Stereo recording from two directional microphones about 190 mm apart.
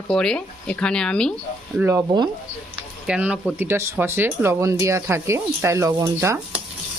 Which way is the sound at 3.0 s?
5° right (ahead or behind).